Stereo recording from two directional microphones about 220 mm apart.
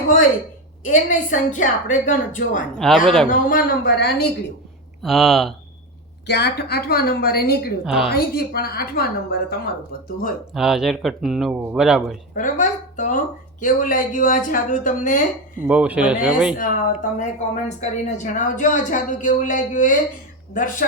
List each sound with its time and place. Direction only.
0.9 s speech: 35° left (ahead or behind)
2.7 s speech: centre (ahead or behind)
3.2 s a woman's voice: 45° left (ahead or behind)
5.0 s speech: centre (ahead or behind)
6.2 s a woman's voice: 50° left (ahead or behind)
7.9 s speech: centre (ahead or behind)
8.1 s a woman's voice: 45° left (ahead or behind)
10.5 s speech: centre (ahead or behind)
12.3 s speech: 35° left (ahead or behind)
15.6 s speech: 5° right (ahead or behind)
16.6 s speech: 35° left (ahead or behind)